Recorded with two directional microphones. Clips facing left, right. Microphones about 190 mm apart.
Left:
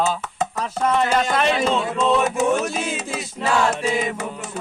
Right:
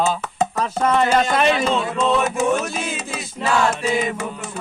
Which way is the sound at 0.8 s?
75° right (ahead or behind).